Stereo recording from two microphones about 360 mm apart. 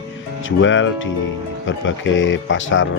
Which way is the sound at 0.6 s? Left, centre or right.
Left.